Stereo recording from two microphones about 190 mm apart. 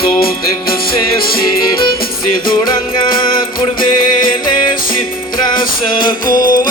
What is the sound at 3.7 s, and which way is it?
Music, 45° left (ahead or behind).